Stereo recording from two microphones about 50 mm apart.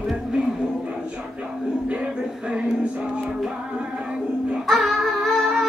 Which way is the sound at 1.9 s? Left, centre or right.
Right.